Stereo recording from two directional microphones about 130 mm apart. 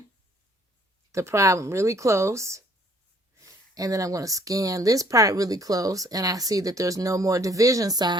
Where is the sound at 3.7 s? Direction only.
25° right (ahead or behind).